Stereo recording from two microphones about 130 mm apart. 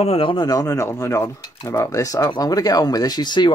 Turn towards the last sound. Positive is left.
turn(degrees=35)  # may be behind; listen again after turning